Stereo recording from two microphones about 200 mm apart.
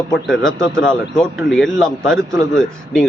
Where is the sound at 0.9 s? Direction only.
5° left (ahead or behind).